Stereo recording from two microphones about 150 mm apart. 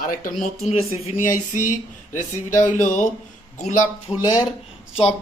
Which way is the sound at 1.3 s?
60° left (ahead or behind).